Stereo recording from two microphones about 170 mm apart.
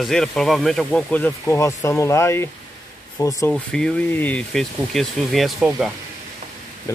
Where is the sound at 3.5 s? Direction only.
5° left (ahead or behind).